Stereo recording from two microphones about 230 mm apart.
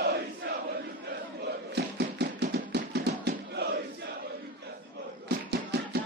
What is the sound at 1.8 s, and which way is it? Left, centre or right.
Chopping, right.